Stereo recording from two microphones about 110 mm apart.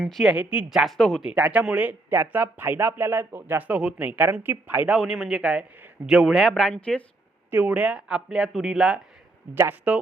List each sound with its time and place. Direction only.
0.0 s speech: centre (ahead or behind)
1.3 s speech: 15° right (ahead or behind); by 7.0 s 10° left (ahead or behind)
7.5 s speech: 10° right (ahead or behind)
9.6 s speech: 15° right (ahead or behind)